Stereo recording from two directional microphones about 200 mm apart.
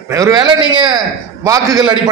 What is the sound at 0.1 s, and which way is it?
A man's voice, 15° right (ahead or behind).